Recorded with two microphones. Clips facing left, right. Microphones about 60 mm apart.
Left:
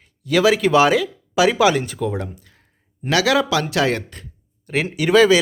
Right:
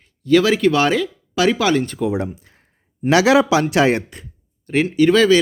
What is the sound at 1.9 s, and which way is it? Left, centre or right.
Speech, centre.